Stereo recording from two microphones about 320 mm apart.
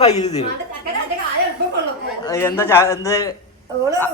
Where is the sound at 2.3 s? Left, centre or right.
Centre.